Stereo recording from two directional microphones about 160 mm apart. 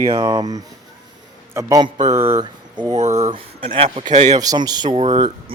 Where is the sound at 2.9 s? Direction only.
45° right (ahead or behind).